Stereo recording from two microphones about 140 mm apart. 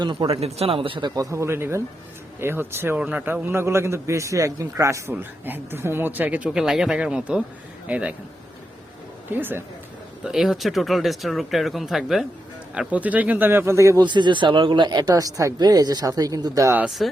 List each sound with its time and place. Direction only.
0.0 s a man's voice: 35° right (ahead or behind); by 8.1 s 10° right (ahead or behind)
9.3 s a man's voice: 15° right (ahead or behind)
10.2 s a man's voice: 5° right (ahead or behind); by 14.0 s 20° right (ahead or behind)
14.0 s speech: 35° right (ahead or behind)
16.7 s speech: 5° right (ahead or behind)